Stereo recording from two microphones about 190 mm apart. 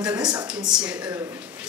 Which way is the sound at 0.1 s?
20° right (ahead or behind).